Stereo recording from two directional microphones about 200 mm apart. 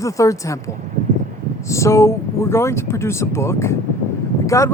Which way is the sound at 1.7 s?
15° left (ahead or behind).